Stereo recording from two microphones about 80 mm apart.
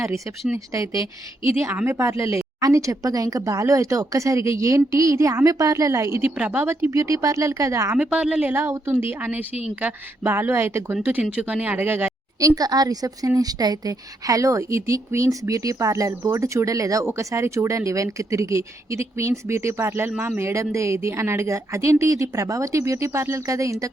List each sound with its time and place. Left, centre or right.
0.5 s speech: right
1.6 s a woman's voice: right
1.9 s speech: right
6.3 s speech: centre
6.6 s a woman's voice: right
6.9 s speech: right
7.9 s a woman's voice: centre; by 10.9 s right
11.0 s a woman's voice: centre
12.4 s speech: right